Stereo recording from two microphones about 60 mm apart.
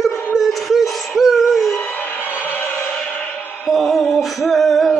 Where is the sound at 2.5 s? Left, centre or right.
Left.